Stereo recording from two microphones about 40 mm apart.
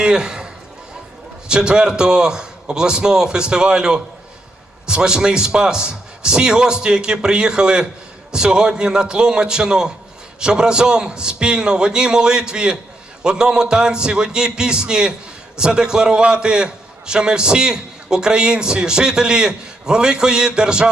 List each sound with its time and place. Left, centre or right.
0.0 s a man's voice: centre
1.5 s a man's voice: right